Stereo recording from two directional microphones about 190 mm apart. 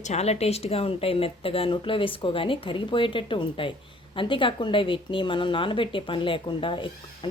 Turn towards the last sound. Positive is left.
turn(degrees=25)  # may be behind; listen again after turning